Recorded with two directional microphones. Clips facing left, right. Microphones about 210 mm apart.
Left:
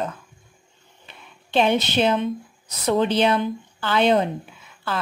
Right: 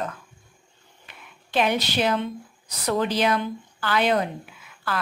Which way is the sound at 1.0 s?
25° left (ahead or behind).